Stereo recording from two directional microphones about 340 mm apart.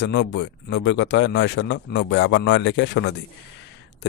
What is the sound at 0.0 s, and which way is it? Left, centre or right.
Speech, left.